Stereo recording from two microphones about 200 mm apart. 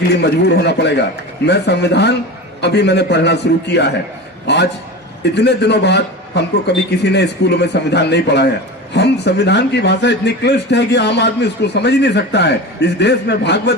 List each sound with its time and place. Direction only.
0.1 s speech: 55° left (ahead or behind)